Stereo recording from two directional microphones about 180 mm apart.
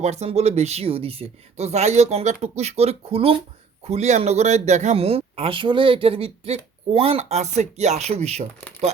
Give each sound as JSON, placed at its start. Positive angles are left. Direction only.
{"t": 0.0, "sound": "speech", "side_deg": -35}